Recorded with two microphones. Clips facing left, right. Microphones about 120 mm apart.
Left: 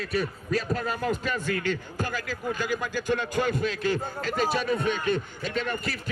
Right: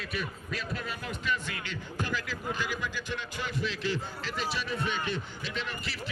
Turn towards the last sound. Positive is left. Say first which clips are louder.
# left 7 dB
turn(degrees=45)  # may be behind; listen again after turning